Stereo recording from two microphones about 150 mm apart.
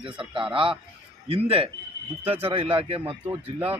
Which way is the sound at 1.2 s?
40° right (ahead or behind).